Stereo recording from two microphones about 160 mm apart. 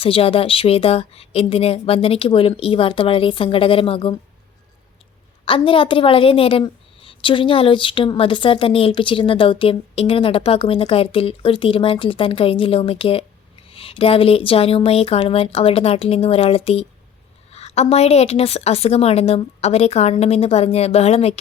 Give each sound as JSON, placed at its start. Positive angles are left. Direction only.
{"t": 0.0, "sound": "a woman's voice", "side_deg": 35}
{"t": 5.5, "sound": "a woman's voice", "side_deg": 35}